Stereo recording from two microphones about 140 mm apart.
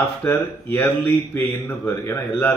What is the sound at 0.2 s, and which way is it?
Speech, 15° left (ahead or behind).